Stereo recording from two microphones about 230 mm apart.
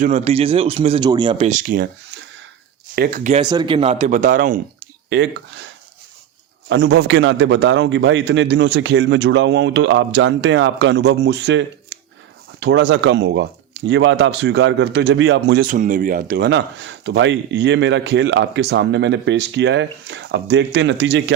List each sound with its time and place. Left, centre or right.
0.0 s speech: right
1.5 s speech: right
2.9 s speech: right
3.4 s speech: centre; by 4.6 s right
5.0 s speech: right
6.7 s speech: right
15.7 s speech: right